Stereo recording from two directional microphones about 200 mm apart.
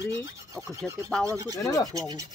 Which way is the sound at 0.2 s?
15° right (ahead or behind).